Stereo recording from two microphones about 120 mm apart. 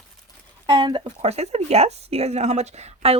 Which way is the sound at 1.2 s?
60° right (ahead or behind).